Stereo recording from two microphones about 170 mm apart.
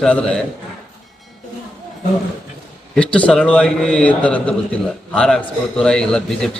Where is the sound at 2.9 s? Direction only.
5° left (ahead or behind).